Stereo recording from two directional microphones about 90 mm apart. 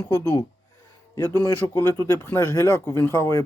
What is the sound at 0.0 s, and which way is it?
Speech, 25° left (ahead or behind).